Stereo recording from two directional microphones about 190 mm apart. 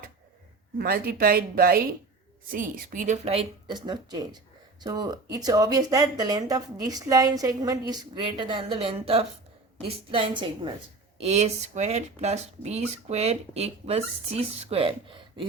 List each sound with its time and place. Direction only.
0.8 s speech: 55° right (ahead or behind); by 15.4 s 25° right (ahead or behind)